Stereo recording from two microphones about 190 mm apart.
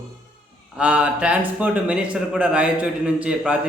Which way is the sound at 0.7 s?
5° right (ahead or behind).